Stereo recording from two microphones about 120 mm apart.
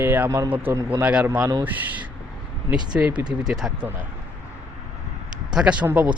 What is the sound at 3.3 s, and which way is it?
Speech, 5° right (ahead or behind).